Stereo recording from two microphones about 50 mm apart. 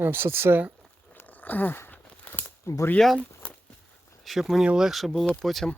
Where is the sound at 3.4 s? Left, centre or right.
Left.